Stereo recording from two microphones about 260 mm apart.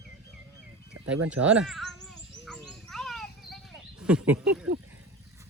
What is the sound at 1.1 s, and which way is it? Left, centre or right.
Turkey, centre.